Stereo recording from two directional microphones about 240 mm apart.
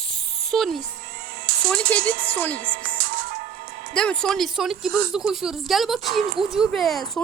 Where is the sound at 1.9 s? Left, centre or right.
Centre.